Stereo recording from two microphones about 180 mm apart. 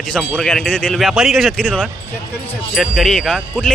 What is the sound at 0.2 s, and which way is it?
Speech, 5° left (ahead or behind).